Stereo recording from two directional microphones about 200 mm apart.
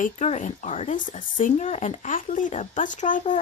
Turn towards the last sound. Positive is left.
turn(degrees=40)  # may be behind; listen again after turning